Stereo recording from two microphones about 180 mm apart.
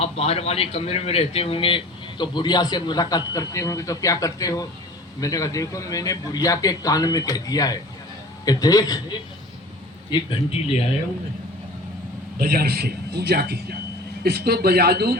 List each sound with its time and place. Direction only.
0.0 s a man's voice: 35° left (ahead or behind)
12.4 s a man's voice: 55° right (ahead or behind)